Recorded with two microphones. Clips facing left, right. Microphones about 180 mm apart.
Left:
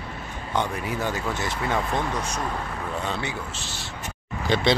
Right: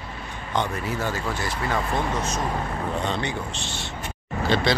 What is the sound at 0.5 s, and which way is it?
Speech, 15° left (ahead or behind).